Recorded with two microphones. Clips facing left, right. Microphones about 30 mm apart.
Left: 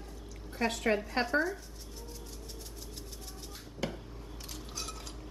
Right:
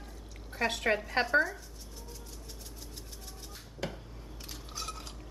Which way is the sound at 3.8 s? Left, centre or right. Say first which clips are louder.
Left 1 dB; centre.